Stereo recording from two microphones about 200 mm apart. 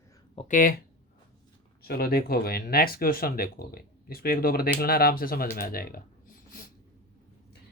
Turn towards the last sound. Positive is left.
turn(degrees=45)  # may be behind; listen again after turning